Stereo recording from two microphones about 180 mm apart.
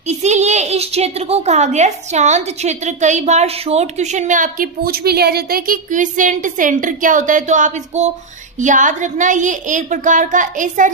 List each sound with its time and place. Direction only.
0.1 s a woman's voice: 40° right (ahead or behind)